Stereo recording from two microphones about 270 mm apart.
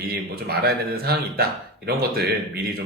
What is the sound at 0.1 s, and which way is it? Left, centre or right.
Speech, right.